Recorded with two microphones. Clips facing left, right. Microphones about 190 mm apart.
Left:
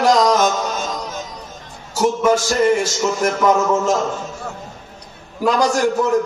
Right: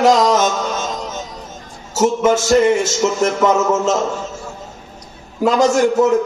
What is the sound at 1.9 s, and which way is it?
Speech, 25° right (ahead or behind).